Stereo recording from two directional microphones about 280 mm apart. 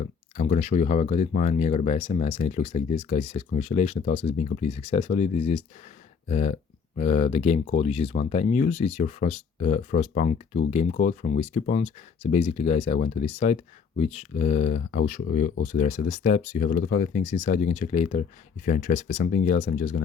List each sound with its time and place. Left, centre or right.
0.0 s speech: left